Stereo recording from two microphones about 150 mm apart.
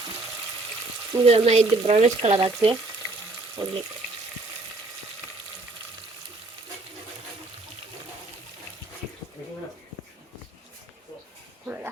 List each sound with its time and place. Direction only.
1.2 s speech: 45° right (ahead or behind)
3.6 s speech: 30° right (ahead or behind)
11.6 s a sound: 10° right (ahead or behind)